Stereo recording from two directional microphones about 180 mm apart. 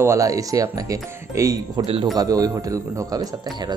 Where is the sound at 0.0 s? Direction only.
15° right (ahead or behind).